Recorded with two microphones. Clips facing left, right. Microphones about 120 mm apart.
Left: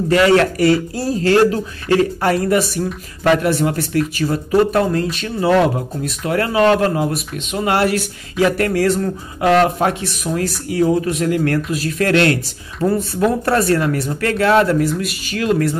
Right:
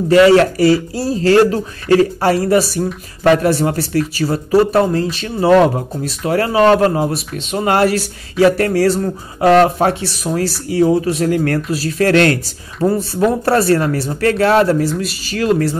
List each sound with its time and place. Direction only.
0.1 s speech: 25° right (ahead or behind)
12.8 s speech: 20° right (ahead or behind)
13.5 s speech: 35° right (ahead or behind)